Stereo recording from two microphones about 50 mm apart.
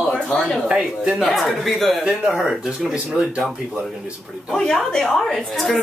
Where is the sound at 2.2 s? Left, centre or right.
Centre.